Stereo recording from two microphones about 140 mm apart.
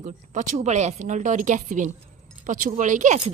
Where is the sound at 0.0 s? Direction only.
65° right (ahead or behind).